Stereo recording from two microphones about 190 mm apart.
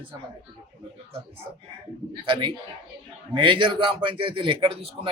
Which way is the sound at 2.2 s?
25° right (ahead or behind).